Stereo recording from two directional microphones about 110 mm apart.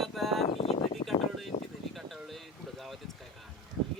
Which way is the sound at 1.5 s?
80° left.